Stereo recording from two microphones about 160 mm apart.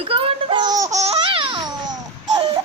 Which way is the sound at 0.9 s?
40° right (ahead or behind).